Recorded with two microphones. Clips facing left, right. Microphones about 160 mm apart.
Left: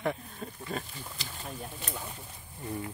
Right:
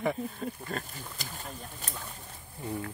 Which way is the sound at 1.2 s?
45° right (ahead or behind).